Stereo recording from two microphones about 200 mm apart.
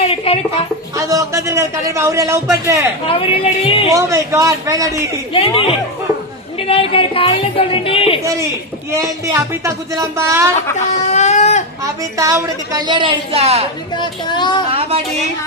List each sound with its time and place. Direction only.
0.0 s a sound: 30° left (ahead or behind)
0.9 s a man's voice: 15° right (ahead or behind)
3.1 s a woman's voice: 30° left (ahead or behind)
3.9 s a man's voice: 15° right (ahead or behind)
5.3 s a woman's voice: 25° left (ahead or behind)
8.2 s a man's voice: 15° right (ahead or behind)
10.8 s a sound: 35° left (ahead or behind)
11.8 s a woman's voice: 15° right (ahead or behind)
13.9 s a woman's voice: 20° left (ahead or behind)
14.7 s a woman's voice: 30° right (ahead or behind)